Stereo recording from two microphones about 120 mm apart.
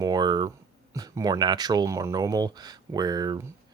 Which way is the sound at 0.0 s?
35° right (ahead or behind).